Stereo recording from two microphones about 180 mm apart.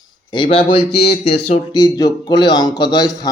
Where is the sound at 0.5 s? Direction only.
30° left (ahead or behind).